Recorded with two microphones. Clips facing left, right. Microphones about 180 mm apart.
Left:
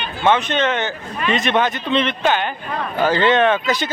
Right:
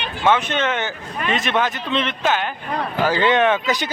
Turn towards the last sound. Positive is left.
turn(degrees=-15)  # may be behind; listen again after turning